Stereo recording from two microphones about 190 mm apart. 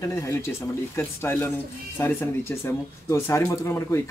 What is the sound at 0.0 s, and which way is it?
Speech, 15° left (ahead or behind).